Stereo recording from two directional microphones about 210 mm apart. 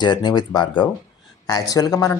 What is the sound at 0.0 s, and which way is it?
A man's voice, 20° left (ahead or behind).